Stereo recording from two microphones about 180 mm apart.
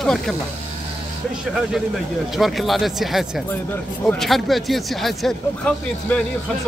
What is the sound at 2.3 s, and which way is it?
Speech, centre (ahead or behind).